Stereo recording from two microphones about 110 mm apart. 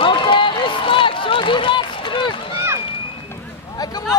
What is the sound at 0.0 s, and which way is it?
Run, 50° left (ahead or behind).